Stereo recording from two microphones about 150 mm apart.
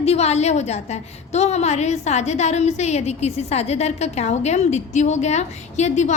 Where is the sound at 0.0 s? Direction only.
45° left (ahead or behind).